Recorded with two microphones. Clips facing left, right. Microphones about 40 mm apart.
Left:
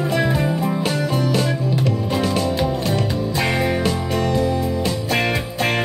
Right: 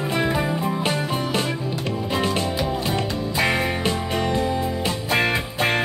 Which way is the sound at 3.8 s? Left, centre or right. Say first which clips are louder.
Left 2 dB; right.